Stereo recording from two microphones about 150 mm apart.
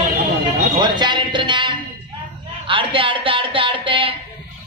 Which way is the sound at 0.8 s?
30° right (ahead or behind).